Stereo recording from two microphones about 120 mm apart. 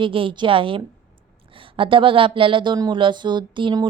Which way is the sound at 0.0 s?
45° right (ahead or behind).